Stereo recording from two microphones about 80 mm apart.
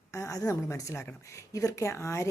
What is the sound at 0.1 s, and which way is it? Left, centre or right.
A woman's voice, left.